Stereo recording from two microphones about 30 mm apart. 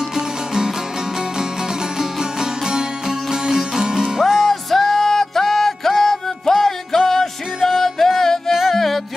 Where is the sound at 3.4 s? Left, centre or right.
Right.